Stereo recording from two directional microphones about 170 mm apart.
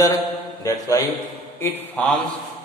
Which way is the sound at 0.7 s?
20° left (ahead or behind).